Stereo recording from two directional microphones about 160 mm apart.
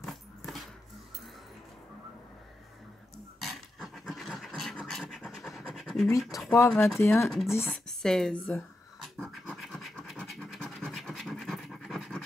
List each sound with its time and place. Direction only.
0.0 s dog: centre (ahead or behind)
3.3 s a sound: centre (ahead or behind)
6.3 s speech: 20° left (ahead or behind)
6.7 s speech: 10° left (ahead or behind)
7.2 s speech: centre (ahead or behind)
9.0 s scratch: 5° left (ahead or behind)